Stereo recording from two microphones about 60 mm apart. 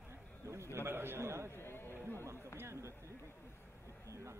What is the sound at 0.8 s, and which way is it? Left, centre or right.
Speech, right.